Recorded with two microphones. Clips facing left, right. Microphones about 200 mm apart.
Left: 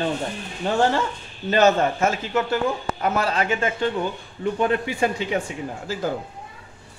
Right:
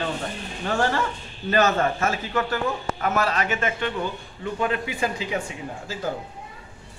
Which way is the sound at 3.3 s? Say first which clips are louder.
Left 2 dB; 30° left (ahead or behind).